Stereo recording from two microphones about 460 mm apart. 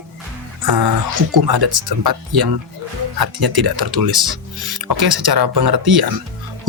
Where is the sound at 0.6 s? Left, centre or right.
Right.